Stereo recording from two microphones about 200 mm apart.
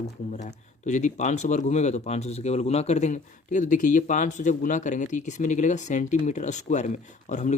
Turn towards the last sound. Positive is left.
turn(degrees=35)  # may be behind; listen again after turning